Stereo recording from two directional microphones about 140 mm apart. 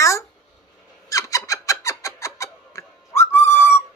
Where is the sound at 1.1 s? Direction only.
25° left (ahead or behind).